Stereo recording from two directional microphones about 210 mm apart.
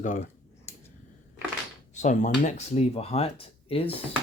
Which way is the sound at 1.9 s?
35° left (ahead or behind).